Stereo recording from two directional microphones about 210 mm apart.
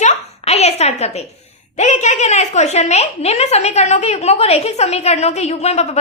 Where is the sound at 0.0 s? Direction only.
30° left (ahead or behind).